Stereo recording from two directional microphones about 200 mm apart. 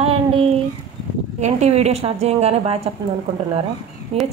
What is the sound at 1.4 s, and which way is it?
A woman's voice, 35° right (ahead or behind).